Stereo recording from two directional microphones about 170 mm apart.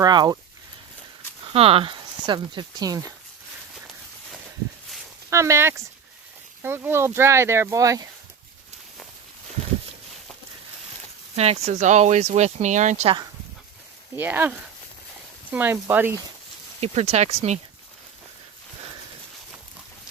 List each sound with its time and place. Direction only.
0.0 s speech: 25° right (ahead or behind)
1.5 s speech: 35° right (ahead or behind)
5.3 s speech: 15° right (ahead or behind)
11.3 s speech: 40° right (ahead or behind)
14.2 s speech: 10° right (ahead or behind)
15.5 s speech: 10° right (ahead or behind)
16.8 s speech: 40° right (ahead or behind)